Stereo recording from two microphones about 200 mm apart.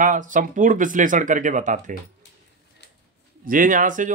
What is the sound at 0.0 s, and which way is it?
Speech, 40° right (ahead or behind).